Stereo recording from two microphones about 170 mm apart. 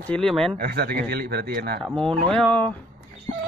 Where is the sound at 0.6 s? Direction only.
65° right (ahead or behind).